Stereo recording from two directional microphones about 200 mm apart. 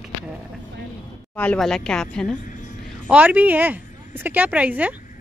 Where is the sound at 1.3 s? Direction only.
5° left (ahead or behind).